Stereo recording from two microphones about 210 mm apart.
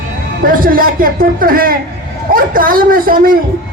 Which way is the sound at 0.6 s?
40° right (ahead or behind).